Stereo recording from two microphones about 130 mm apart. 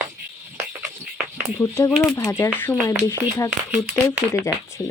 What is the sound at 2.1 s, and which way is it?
Speech, 20° left (ahead or behind).